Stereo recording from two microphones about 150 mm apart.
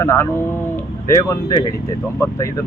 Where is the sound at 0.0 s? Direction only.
20° left (ahead or behind).